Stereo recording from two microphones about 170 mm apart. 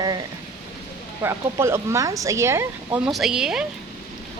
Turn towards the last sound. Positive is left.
turn(degrees=-5)  # may be behind; listen again after turning